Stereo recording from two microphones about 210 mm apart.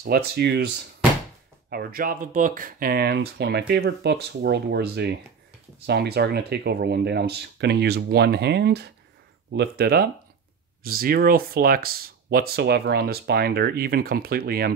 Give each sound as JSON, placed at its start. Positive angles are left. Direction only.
{"t": 0.0, "sound": "speech", "side_deg": -45}
{"t": 1.7, "sound": "speech", "side_deg": -45}